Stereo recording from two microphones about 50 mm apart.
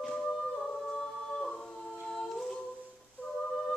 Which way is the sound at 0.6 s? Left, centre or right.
Centre.